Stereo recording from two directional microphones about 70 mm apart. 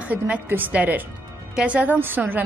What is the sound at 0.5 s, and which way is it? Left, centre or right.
A woman's voice, right.